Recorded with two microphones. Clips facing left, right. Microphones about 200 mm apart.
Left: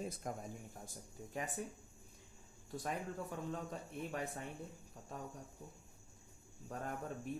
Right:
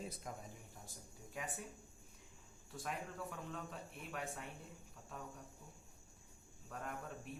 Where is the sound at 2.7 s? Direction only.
35° left (ahead or behind).